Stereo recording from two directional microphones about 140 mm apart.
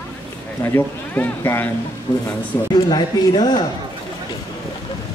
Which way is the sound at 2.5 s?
15° left (ahead or behind).